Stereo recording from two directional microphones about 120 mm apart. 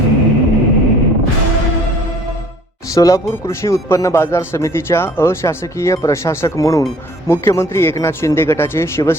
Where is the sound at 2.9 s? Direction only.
30° left (ahead or behind).